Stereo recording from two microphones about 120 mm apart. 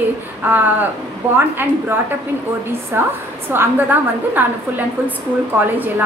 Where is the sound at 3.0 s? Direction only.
15° right (ahead or behind).